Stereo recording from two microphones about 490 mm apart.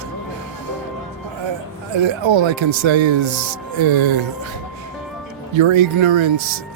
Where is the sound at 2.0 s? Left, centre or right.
Right.